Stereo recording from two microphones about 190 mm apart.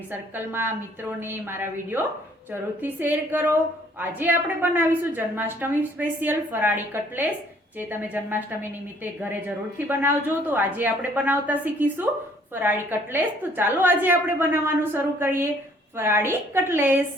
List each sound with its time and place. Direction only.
0.1 s a woman's voice: 10° right (ahead or behind)